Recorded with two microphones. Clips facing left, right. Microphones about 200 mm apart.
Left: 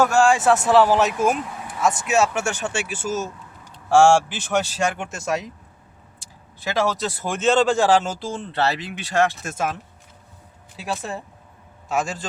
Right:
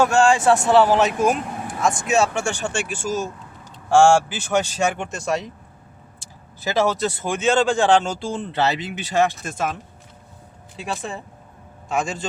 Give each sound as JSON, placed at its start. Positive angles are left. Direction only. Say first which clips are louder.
{"t": 0.1, "sound": "speech", "louder": "right 1 dB", "side_deg": 0}
{"t": 1.5, "sound": "a sound", "louder": "right 4 dB", "side_deg": -50}
{"t": 1.8, "sound": "speech", "louder": "even", "side_deg": 5}
{"t": 4.9, "sound": "speech", "louder": "right 1 dB", "side_deg": 5}
{"t": 10.8, "sound": "speech", "louder": "even", "side_deg": 5}